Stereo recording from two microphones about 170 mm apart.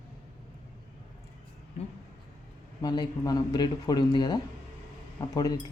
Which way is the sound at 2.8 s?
25° left (ahead or behind).